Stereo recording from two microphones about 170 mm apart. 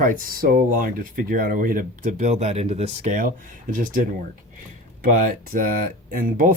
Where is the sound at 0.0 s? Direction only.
55° right (ahead or behind); by 3.2 s 35° right (ahead or behind).